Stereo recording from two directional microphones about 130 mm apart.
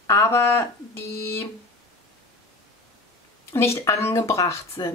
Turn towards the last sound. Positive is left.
turn(degrees=25)  # may be behind; listen again after turning